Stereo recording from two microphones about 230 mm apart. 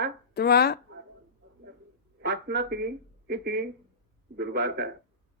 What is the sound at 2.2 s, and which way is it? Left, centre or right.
A man's voice, right.